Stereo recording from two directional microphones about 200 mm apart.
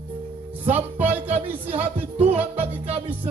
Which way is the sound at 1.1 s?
30° right (ahead or behind).